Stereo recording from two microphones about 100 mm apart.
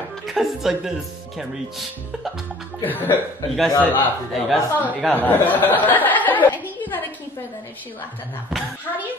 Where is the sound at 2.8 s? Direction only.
20° left (ahead or behind).